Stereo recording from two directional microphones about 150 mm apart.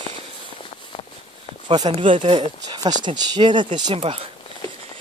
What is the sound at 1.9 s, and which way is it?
Speech, 35° right (ahead or behind).